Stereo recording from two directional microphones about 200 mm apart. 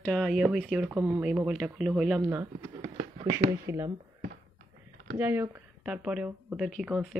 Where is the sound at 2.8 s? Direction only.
30° right (ahead or behind).